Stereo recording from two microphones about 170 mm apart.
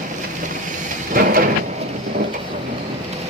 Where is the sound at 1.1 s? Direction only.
55° right (ahead or behind).